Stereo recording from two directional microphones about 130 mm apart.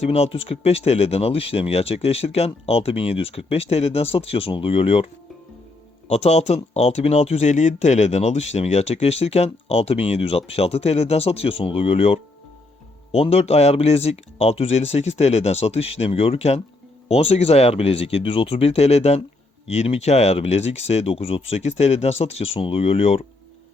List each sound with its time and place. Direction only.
0.0 s speech: 50° left (ahead or behind)
6.1 s speech: 55° left (ahead or behind)